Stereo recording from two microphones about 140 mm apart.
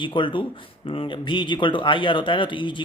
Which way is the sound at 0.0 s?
35° left (ahead or behind).